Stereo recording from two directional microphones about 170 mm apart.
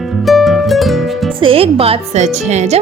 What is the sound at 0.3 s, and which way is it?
Music, centre (ahead or behind).